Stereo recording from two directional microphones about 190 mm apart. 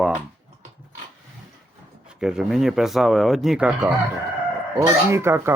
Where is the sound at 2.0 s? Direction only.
5° right (ahead or behind).